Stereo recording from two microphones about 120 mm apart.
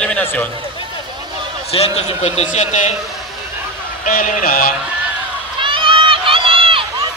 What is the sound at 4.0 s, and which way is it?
Speech, 90° left.